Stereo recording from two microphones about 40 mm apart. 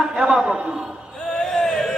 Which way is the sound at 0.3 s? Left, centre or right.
Right.